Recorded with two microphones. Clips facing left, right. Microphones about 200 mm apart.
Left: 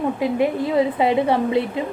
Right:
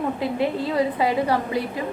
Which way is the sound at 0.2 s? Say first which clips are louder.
Left 4 dB; 15° left (ahead or behind).